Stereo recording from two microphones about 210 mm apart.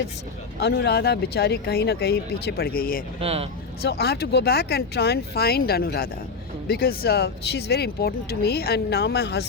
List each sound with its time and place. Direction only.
0.6 s speech: 50° left (ahead or behind)
3.2 s speech: 30° right (ahead or behind)
3.8 s speech: 50° left (ahead or behind)